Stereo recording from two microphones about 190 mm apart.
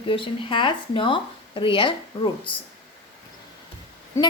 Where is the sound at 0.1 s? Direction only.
25° left (ahead or behind).